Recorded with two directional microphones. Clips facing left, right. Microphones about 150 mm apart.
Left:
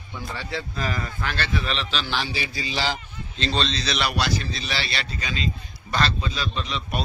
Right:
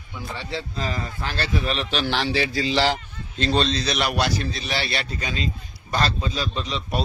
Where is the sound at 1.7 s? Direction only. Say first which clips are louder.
Right 3 dB; 55° right (ahead or behind).